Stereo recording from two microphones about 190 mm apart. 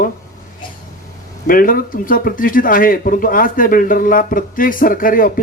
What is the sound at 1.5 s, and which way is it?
A man's voice, 50° left (ahead or behind).